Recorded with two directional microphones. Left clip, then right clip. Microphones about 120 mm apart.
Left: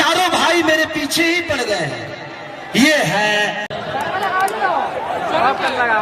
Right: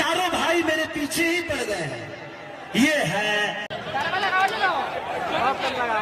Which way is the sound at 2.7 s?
25° left (ahead or behind).